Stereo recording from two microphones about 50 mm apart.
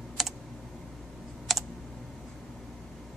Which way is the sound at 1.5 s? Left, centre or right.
Centre.